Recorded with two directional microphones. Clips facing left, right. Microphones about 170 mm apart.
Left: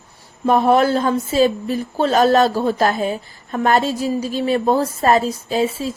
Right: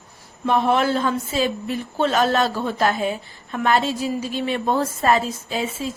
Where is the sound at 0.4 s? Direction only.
40° left (ahead or behind).